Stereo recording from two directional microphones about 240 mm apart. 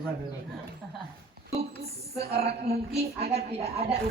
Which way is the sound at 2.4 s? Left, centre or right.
Right.